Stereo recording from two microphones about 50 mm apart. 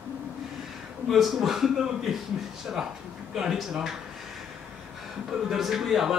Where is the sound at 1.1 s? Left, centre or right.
Centre.